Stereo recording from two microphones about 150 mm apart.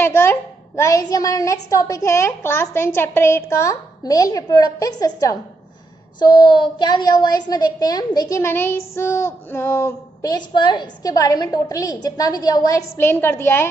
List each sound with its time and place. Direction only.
0.0 s a woman's voice: 15° left (ahead or behind)
10.3 s a woman's voice: 30° left (ahead or behind); by 13.7 s 15° left (ahead or behind)